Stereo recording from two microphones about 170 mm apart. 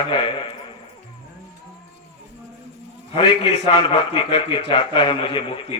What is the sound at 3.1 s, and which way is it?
A man's voice, 30° left (ahead or behind).